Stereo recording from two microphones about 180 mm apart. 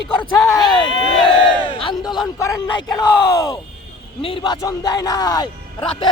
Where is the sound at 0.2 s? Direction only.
10° left (ahead or behind).